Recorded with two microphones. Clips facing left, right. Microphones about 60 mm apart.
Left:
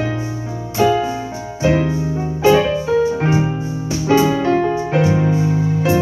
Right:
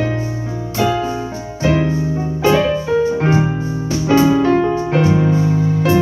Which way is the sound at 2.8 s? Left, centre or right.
Right.